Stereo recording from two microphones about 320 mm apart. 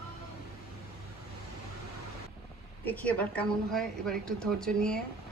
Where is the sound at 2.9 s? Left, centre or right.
Centre.